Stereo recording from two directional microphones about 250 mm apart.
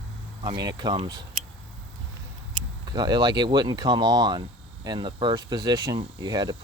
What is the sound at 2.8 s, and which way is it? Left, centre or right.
Speech, centre.